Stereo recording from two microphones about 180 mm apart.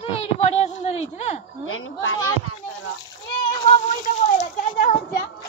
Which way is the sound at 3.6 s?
45° left (ahead or behind).